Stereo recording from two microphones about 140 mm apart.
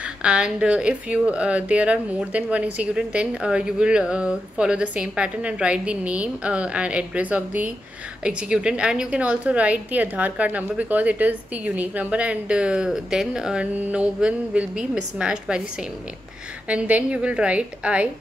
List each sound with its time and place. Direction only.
0.0 s speech: 5° right (ahead or behind)
16.6 s speech: 10° right (ahead or behind)